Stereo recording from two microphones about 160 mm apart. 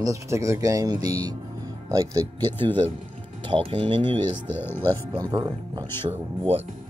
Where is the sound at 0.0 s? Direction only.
20° right (ahead or behind).